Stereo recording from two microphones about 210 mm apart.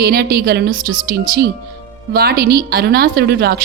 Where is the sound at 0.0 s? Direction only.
45° right (ahead or behind).